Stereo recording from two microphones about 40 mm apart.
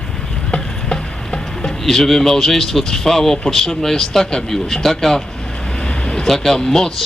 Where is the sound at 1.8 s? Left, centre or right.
Centre.